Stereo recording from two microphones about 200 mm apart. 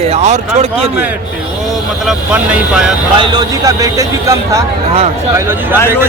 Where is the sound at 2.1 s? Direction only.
5° right (ahead or behind).